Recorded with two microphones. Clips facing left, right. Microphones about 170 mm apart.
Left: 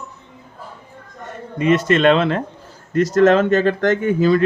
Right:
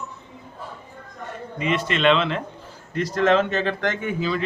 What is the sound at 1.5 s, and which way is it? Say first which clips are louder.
Speech: left 9 dB; 45° left (ahead or behind).